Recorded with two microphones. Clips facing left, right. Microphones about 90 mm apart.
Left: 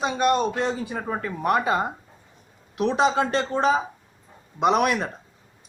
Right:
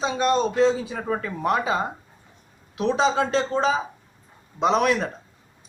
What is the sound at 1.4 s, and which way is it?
Speech, 60° left (ahead or behind).